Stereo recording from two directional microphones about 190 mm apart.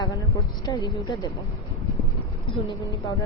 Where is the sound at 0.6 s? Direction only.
20° left (ahead or behind).